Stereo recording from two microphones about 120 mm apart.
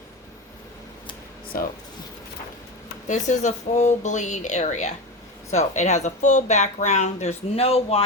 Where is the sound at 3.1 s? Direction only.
85° left; by 8.0 s 55° left (ahead or behind).